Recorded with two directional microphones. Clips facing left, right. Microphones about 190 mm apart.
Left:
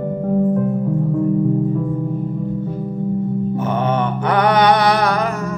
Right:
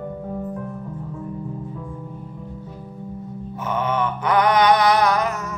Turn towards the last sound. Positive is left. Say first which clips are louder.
# left 2 dB
turn(degrees=30)  # may be behind; listen again after turning